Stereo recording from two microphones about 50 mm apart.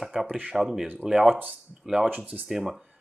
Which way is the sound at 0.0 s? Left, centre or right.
Centre.